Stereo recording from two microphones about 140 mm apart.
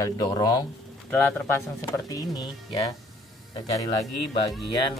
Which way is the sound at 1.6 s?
20° left (ahead or behind).